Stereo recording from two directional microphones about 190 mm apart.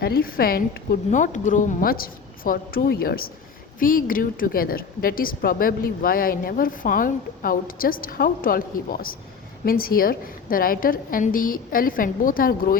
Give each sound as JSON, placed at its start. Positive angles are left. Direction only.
{"t": 0.0, "sound": "a woman's voice", "side_deg": 50}